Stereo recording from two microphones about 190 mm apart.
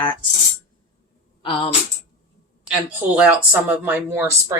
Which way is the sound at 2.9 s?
5° right (ahead or behind).